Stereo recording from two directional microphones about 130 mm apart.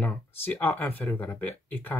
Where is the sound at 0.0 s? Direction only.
15° left (ahead or behind).